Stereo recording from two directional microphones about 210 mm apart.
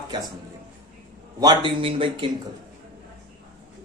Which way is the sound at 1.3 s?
20° right (ahead or behind).